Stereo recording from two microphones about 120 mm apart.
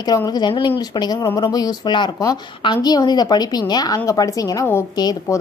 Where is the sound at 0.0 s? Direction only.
35° left (ahead or behind).